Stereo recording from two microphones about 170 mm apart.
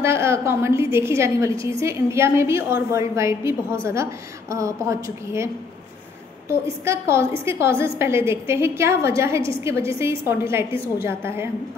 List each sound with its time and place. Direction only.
0.0 s a woman's voice: 15° right (ahead or behind)
6.8 s a woman's voice: 15° right (ahead or behind)